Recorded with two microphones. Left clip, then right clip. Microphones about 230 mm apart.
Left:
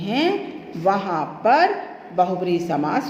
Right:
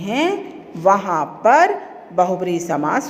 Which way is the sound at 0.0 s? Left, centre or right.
Right.